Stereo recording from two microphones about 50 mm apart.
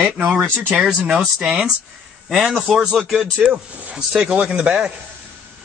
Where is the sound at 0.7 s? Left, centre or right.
Centre.